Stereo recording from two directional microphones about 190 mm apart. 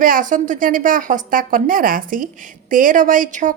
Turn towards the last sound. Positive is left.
turn(degrees=-45)  # may be behind; listen again after turning